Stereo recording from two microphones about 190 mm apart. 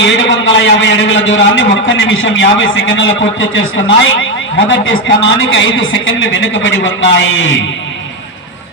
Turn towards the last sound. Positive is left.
turn(degrees=75)  # may be behind; listen again after turning